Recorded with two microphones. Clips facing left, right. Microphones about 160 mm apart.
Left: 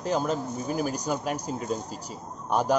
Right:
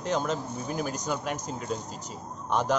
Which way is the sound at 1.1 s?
40° left (ahead or behind).